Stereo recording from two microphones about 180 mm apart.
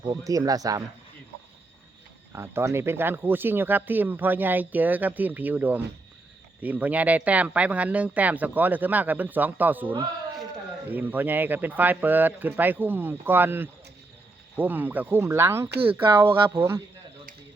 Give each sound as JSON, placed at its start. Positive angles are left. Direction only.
{"t": 0.0, "sound": "speech", "side_deg": -20}
{"t": 2.3, "sound": "speech", "side_deg": -15}